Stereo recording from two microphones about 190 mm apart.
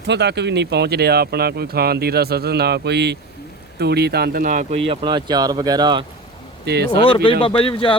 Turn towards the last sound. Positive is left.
turn(degrees=30)  # may be behind; listen again after turning